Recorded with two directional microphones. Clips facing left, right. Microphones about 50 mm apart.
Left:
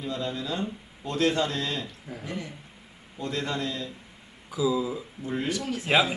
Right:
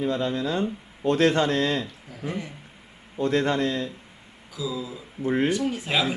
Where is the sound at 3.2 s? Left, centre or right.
Right.